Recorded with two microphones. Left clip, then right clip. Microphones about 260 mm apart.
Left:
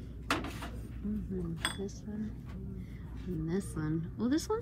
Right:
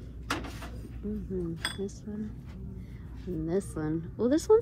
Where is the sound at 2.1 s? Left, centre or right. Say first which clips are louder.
Right 3 dB; right.